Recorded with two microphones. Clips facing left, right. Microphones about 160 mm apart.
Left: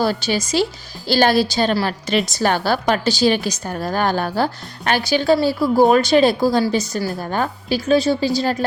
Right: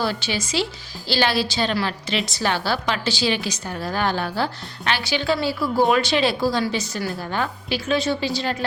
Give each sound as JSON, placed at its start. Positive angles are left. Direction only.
{"t": 0.0, "sound": "a woman's voice", "side_deg": 40}